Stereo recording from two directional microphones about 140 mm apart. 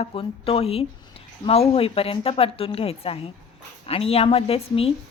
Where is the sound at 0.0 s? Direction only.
40° left (ahead or behind).